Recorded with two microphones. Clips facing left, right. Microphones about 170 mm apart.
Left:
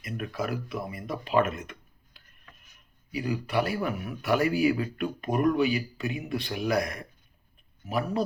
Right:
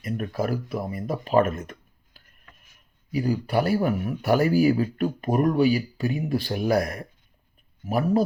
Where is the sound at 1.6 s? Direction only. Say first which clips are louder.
Right 4 dB; 40° right (ahead or behind).